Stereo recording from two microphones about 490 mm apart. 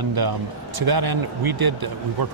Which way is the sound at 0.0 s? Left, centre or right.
Right.